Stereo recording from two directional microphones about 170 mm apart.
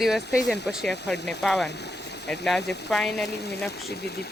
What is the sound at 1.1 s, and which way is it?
Speech, 85° left.